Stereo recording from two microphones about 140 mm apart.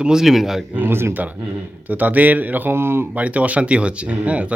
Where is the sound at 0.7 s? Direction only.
15° right (ahead or behind).